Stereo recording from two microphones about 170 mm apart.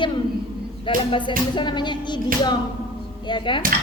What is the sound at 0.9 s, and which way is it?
A woman's voice, 30° left (ahead or behind).